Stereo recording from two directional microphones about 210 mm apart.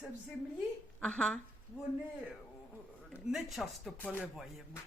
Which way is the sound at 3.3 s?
Centre (ahead or behind).